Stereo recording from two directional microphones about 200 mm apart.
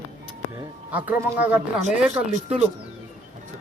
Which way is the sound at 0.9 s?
10° right (ahead or behind).